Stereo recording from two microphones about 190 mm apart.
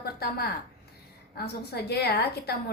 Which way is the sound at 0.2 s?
55° left (ahead or behind).